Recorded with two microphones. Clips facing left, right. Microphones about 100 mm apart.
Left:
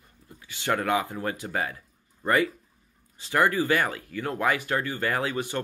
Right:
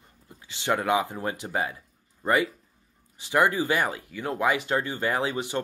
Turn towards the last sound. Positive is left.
turn(degrees=-20)  # may be behind; listen again after turning